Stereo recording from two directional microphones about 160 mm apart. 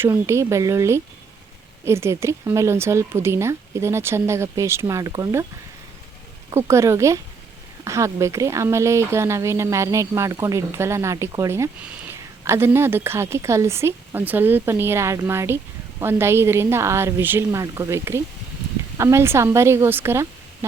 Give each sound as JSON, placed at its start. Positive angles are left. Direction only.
{"t": 0.0, "sound": "speech", "side_deg": -15}
{"t": 6.5, "sound": "speech", "side_deg": -15}